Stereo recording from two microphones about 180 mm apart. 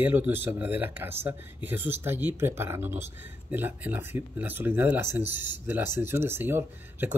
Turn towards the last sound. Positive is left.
turn(degrees=-10)  # may be behind; listen again after turning